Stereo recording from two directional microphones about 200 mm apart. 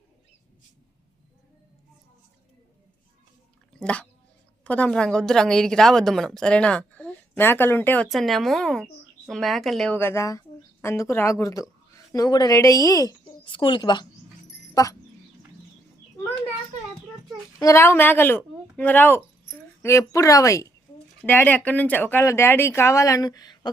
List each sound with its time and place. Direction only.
3.8 s a woman's voice: 5° left (ahead or behind)
17.6 s speech: 15° left (ahead or behind)